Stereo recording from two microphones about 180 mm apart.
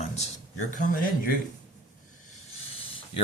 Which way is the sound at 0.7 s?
50° left (ahead or behind).